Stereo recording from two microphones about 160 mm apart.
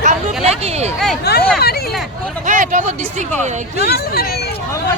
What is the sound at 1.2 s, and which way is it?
Hubbub, 90° left.